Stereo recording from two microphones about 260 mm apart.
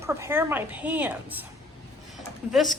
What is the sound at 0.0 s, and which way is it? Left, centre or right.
A woman's voice, centre.